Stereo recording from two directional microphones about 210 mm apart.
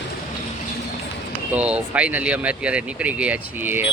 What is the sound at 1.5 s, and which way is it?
Speech, 5° right (ahead or behind).